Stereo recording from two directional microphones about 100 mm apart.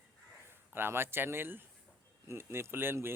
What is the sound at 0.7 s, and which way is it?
Speech, 20° right (ahead or behind).